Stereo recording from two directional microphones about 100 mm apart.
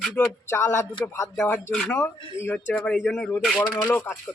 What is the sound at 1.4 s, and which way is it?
A man's voice, 10° left (ahead or behind).